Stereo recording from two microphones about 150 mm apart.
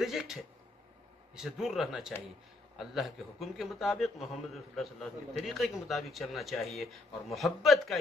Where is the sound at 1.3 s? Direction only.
5° right (ahead or behind).